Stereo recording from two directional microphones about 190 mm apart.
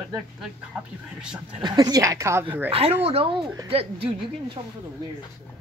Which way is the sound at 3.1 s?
30° right (ahead or behind).